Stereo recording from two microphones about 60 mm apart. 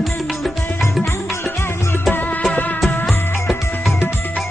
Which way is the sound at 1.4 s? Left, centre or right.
Left.